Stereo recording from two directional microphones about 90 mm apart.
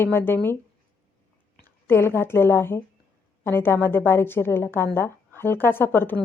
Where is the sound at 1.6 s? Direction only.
25° left (ahead or behind).